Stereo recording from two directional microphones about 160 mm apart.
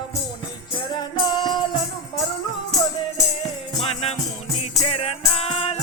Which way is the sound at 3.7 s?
40° left (ahead or behind).